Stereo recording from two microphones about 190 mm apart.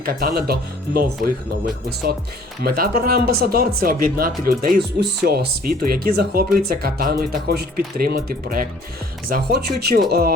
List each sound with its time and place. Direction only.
0.0 s speech: 50° right (ahead or behind)
2.7 s speech: 50° right (ahead or behind)